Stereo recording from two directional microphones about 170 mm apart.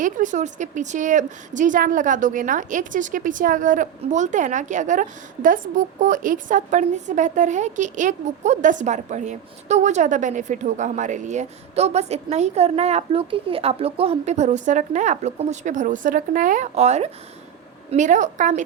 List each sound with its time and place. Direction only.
0.0 s a woman's voice: 50° right (ahead or behind)